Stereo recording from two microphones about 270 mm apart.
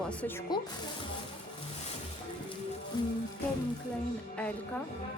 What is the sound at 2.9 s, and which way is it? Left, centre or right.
Speech, centre.